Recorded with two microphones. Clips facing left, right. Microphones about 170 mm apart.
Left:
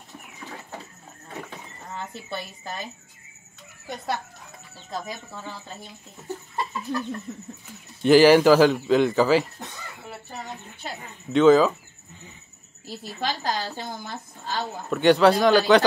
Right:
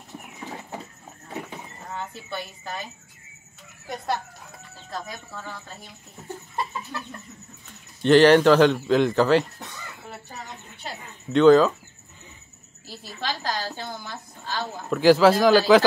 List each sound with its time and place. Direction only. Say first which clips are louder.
8.0 s a man's voice: even; 5° left (ahead or behind)
11.3 s a man's voice: right 1 dB; centre (ahead or behind)
12.8 s a woman's voice: left 2 dB; 50° left (ahead or behind)
14.9 s a man's voice: right 1 dB; centre (ahead or behind)